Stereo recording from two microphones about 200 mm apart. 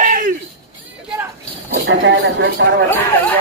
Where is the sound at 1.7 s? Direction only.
65° right (ahead or behind).